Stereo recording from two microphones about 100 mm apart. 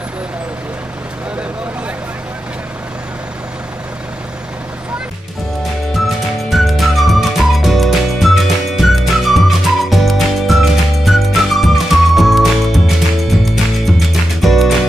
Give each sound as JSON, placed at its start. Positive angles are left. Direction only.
{"t": 5.9, "sound": "music", "side_deg": 0}